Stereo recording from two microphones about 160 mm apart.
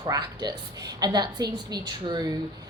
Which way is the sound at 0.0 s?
25° right (ahead or behind).